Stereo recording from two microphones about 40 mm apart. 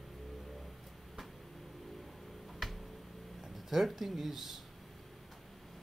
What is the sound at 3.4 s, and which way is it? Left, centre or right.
Speech, centre.